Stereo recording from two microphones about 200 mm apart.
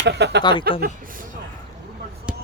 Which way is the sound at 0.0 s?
55° right (ahead or behind).